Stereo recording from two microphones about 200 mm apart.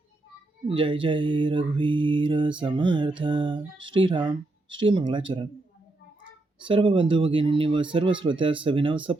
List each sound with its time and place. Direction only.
0.7 s mantra: 25° right (ahead or behind)
6.7 s mantra: 25° right (ahead or behind)